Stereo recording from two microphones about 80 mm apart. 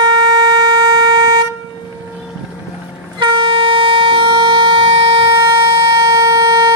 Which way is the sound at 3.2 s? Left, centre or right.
Right.